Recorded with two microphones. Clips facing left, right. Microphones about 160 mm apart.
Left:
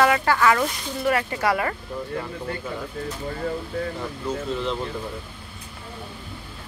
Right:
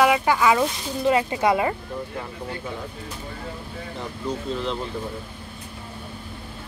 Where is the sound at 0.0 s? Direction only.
15° right (ahead or behind).